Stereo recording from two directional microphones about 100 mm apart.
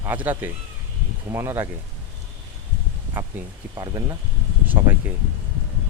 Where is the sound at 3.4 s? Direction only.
15° right (ahead or behind).